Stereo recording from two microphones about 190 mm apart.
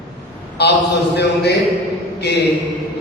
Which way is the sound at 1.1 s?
60° left (ahead or behind).